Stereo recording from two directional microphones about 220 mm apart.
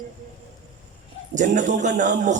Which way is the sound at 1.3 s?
35° right (ahead or behind).